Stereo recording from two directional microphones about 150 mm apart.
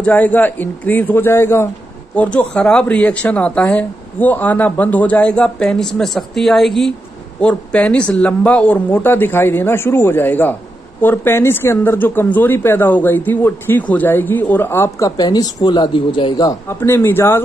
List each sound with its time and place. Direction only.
0.0 s speech: 10° left (ahead or behind); by 16.5 s 30° left (ahead or behind)
16.6 s speech: 15° left (ahead or behind)